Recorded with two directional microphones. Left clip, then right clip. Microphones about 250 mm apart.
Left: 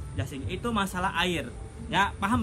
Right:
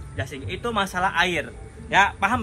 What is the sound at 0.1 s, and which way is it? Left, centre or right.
A man's voice, left.